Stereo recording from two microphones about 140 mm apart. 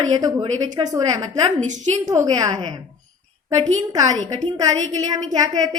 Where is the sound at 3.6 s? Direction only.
25° right (ahead or behind).